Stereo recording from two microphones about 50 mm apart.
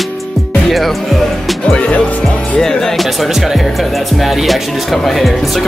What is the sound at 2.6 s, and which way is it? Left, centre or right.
Speech, centre.